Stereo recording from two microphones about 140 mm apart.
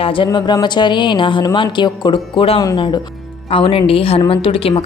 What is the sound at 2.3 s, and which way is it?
Speech, 45° left (ahead or behind).